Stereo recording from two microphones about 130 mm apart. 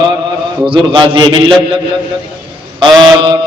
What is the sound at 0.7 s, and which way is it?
A man's voice, 40° right (ahead or behind).